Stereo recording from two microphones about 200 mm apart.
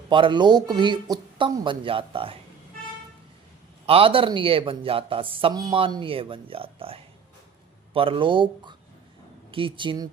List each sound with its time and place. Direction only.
0.1 s speech: 25° right (ahead or behind)
3.8 s speech: 25° right (ahead or behind)